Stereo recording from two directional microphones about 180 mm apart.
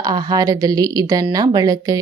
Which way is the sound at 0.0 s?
20° right (ahead or behind).